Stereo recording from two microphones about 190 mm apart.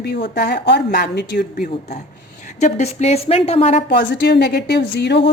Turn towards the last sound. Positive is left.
turn(degrees=65)  # may be behind; listen again after turning